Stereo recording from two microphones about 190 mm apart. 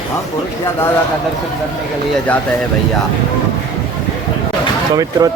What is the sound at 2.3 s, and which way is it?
Speech, 5° left (ahead or behind).